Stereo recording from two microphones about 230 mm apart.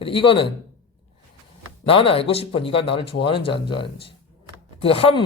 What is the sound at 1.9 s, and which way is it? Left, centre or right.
Speech, left.